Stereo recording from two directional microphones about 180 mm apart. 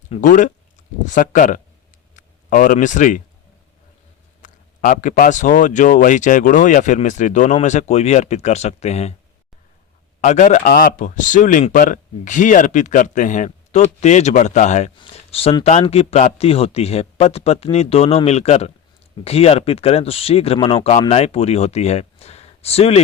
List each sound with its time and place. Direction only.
0.1 s speech: 45° left (ahead or behind)
4.4 s speech: 45° left (ahead or behind)
10.2 s speech: 40° left (ahead or behind)